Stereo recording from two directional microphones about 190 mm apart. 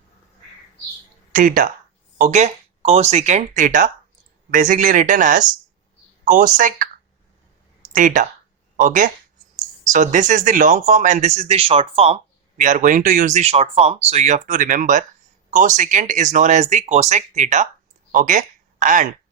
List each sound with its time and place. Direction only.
1.3 s speech: 45° right (ahead or behind)
7.9 s speech: 40° right (ahead or behind)